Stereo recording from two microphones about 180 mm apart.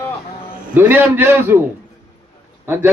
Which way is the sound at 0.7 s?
10° right (ahead or behind).